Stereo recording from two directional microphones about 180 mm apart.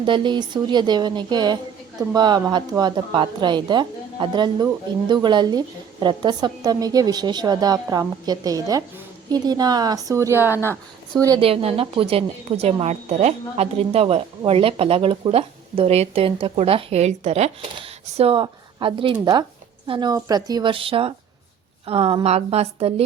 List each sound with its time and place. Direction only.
0.0 s a woman's voice: 25° right (ahead or behind); by 10.6 s 10° right (ahead or behind)
11.3 s a woman's voice: 30° right (ahead or behind)